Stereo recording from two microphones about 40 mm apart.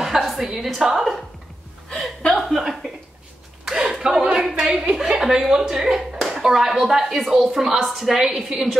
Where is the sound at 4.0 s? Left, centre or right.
Centre.